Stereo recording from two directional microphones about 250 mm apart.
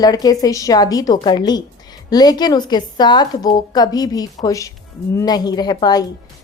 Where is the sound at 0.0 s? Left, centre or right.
Centre.